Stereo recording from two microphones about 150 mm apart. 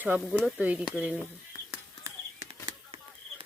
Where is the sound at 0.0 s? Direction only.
10° right (ahead or behind).